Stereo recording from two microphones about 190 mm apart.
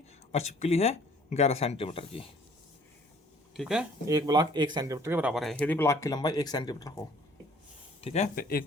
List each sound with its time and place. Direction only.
0.3 s speech: 35° left (ahead or behind)
3.5 s speech: centre (ahead or behind)
4.0 s speech: 20° right (ahead or behind); by 7.0 s 20° left (ahead or behind)
8.0 s speech: 35° left (ahead or behind)
8.4 s speech: 50° left (ahead or behind)